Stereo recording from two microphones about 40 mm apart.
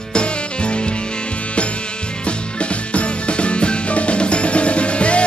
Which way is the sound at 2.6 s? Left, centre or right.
Left.